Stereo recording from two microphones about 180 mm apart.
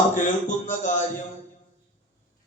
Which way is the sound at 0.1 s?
45° left (ahead or behind).